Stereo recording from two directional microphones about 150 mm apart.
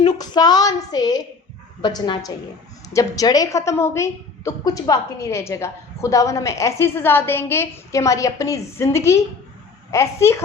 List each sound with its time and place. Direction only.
0.0 s a woman's voice: 25° left (ahead or behind)